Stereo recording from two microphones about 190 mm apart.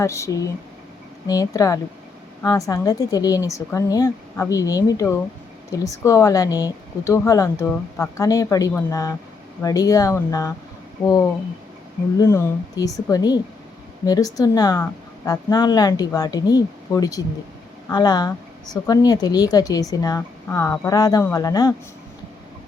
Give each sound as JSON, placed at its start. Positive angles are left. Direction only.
{"t": 0.0, "sound": "speech", "side_deg": 15}